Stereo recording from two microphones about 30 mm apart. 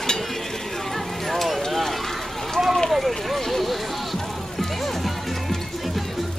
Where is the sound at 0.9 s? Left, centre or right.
Centre.